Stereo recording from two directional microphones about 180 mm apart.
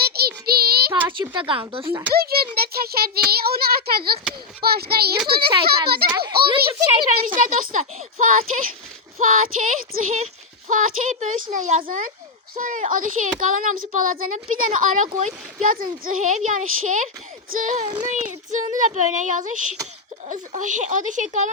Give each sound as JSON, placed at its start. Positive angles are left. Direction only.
{"t": 0.0, "sound": "child singing", "side_deg": -60}
{"t": 1.1, "sound": "speech", "side_deg": -25}
{"t": 1.9, "sound": "a child's voice", "side_deg": -15}
{"t": 2.6, "sound": "a child's voice", "side_deg": -60}
{"t": 6.9, "sound": "speech", "side_deg": -25}
{"t": 7.3, "sound": "speech", "side_deg": -45}